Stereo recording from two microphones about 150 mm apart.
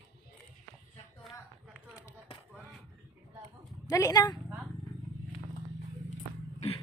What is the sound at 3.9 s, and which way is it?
Speech, 20° left (ahead or behind).